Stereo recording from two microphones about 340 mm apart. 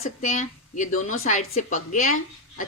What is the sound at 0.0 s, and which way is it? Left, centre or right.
Speech, left.